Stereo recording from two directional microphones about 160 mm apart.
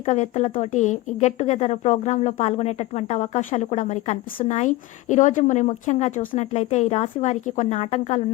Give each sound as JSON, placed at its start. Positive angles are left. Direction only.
{"t": 0.0, "sound": "a woman's voice", "side_deg": 45}